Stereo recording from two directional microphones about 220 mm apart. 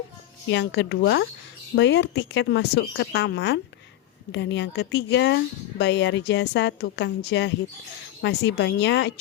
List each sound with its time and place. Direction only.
0.5 s speech: 50° left (ahead or behind)